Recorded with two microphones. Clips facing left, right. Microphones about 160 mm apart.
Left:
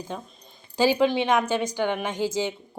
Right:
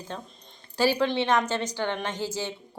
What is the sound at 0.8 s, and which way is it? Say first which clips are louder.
A woman's voice: left 3 dB; 15° left (ahead or behind).